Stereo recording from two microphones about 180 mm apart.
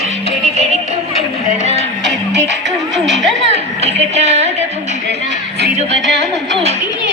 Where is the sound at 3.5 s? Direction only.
35° right (ahead or behind).